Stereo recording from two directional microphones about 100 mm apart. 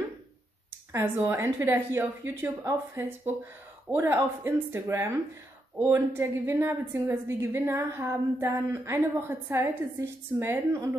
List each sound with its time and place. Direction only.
0.7 s a woman's voice: 20° right (ahead or behind)